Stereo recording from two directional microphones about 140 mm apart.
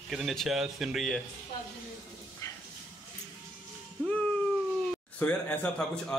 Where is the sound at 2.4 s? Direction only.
25° left (ahead or behind).